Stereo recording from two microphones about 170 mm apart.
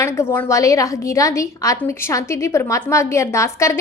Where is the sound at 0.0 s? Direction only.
15° left (ahead or behind).